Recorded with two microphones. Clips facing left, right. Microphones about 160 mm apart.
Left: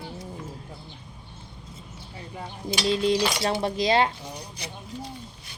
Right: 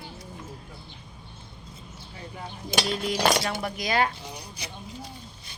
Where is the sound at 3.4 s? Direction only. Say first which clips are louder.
Left 6 dB; 30° left (ahead or behind).